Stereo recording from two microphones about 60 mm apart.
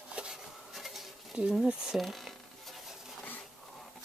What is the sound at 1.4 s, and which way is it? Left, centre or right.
Speech, right.